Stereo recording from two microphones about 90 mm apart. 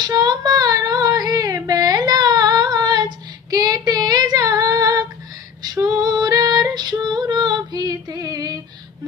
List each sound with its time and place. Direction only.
0.0 s child singing: 50° right (ahead or behind)
5.6 s female singing: 50° right (ahead or behind)